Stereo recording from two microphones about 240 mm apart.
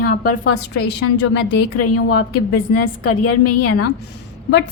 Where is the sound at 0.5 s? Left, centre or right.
Left.